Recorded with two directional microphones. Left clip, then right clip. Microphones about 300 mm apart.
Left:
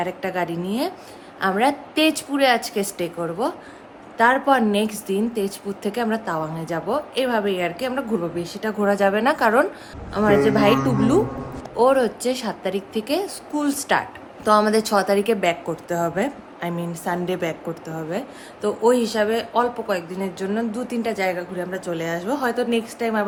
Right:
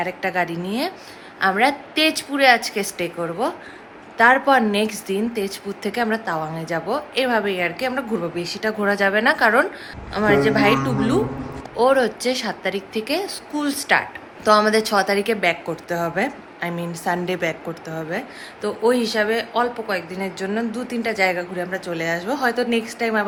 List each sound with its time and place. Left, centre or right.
0.0 s a woman's voice: centre